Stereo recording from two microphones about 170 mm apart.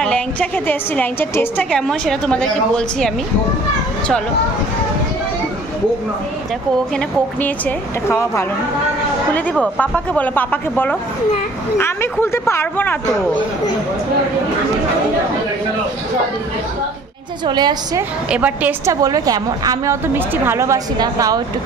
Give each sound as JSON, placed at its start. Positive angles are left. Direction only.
{"t": 0.0, "sound": "a woman's voice", "side_deg": 5}
{"t": 7.4, "sound": "speech", "side_deg": 10}
{"t": 9.8, "sound": "speech", "side_deg": 10}
{"t": 17.5, "sound": "a woman's voice", "side_deg": -25}
{"t": 18.3, "sound": "a woman's voice", "side_deg": -10}